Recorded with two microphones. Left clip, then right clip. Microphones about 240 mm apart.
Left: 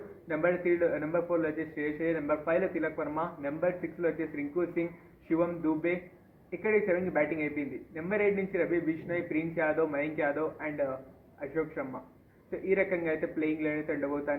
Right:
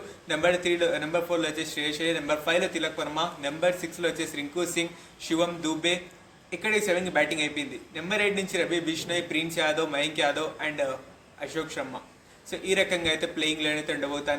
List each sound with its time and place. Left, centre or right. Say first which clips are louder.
0.7 s a man's voice: right 3 dB; right